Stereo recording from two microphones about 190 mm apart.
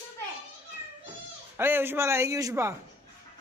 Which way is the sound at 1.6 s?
10° right (ahead or behind).